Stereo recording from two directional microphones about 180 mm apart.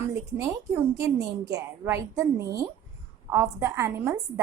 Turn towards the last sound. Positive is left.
turn(degrees=-15)  # may be behind; listen again after turning